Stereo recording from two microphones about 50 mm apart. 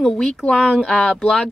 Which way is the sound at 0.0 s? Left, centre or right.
Centre.